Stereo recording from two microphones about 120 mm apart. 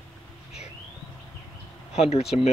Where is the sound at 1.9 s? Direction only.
60° left (ahead or behind).